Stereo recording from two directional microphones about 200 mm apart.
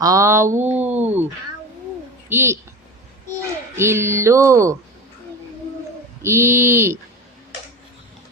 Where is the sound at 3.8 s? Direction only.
10° right (ahead or behind).